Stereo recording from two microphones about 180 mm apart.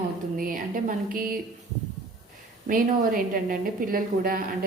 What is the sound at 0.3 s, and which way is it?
Speech, 50° right (ahead or behind).